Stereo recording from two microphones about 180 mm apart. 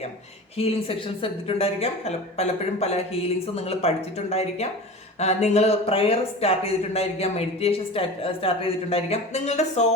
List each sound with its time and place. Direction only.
0.5 s speech: 30° left (ahead or behind)